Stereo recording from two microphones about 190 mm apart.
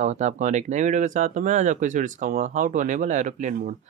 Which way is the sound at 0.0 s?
40° right (ahead or behind).